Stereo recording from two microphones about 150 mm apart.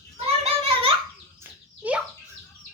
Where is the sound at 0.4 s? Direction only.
40° right (ahead or behind).